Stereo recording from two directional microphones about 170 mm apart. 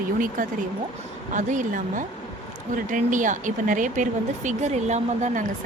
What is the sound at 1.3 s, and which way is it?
Speech, 50° right (ahead or behind).